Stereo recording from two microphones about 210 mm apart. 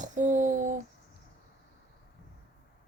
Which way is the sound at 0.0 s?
35° right (ahead or behind).